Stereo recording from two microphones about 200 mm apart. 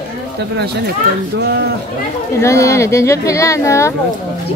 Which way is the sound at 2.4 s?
15° left (ahead or behind).